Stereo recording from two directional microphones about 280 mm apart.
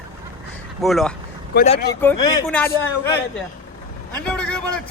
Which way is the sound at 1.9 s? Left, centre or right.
Centre.